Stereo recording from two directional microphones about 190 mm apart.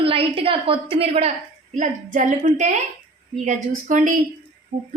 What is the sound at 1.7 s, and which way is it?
Female singing, 45° right (ahead or behind).